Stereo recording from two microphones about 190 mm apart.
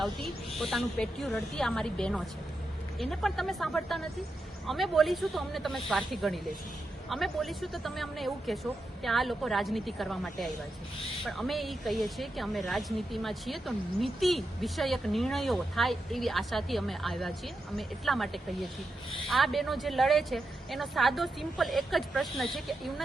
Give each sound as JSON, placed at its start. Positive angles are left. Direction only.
{"t": 0.0, "sound": "speech", "side_deg": 0}